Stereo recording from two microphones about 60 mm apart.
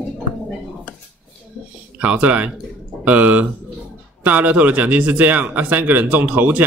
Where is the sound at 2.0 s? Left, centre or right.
Right.